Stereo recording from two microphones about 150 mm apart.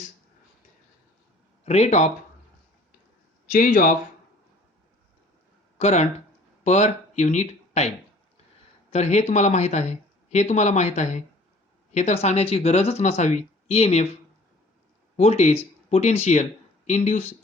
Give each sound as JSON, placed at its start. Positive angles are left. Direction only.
{"t": 1.6, "sound": "speech", "side_deg": 45}
{"t": 3.4, "sound": "speech", "side_deg": 65}
{"t": 5.7, "sound": "speech", "side_deg": 50}
{"t": 15.1, "sound": "speech", "side_deg": 45}